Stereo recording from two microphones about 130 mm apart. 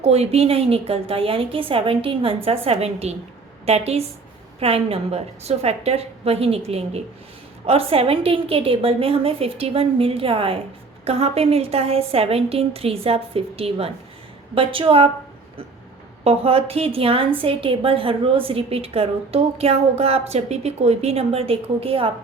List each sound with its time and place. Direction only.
0.0 s a woman's voice: 55° right (ahead or behind)
16.2 s a woman's voice: 50° right (ahead or behind)